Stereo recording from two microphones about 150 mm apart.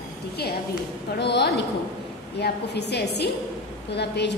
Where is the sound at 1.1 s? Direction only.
90° left.